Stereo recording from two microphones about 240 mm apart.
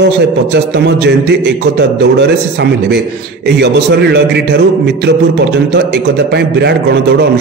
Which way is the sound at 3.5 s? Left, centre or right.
Right.